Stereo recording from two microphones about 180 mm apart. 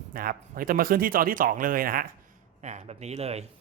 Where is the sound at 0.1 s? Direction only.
50° right (ahead or behind).